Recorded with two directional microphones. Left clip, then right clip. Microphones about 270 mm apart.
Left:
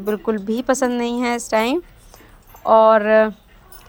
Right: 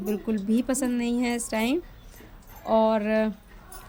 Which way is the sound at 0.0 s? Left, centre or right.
Left.